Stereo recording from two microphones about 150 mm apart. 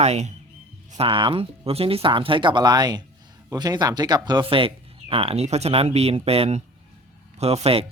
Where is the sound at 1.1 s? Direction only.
35° right (ahead or behind).